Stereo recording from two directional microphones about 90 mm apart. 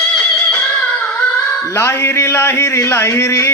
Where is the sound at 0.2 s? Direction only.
15° left (ahead or behind).